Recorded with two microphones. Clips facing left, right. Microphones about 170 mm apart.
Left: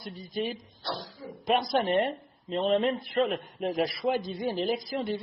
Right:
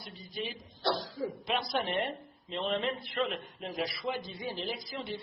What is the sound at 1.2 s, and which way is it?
Speech, 75° right (ahead or behind).